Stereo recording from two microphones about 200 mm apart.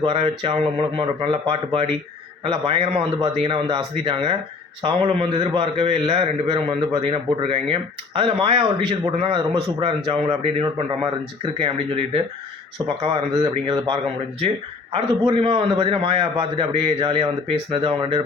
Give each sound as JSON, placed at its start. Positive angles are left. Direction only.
{"t": 0.0, "sound": "a man's voice", "side_deg": -25}